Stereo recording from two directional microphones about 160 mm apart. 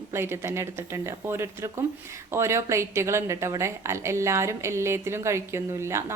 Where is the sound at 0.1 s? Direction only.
15° right (ahead or behind).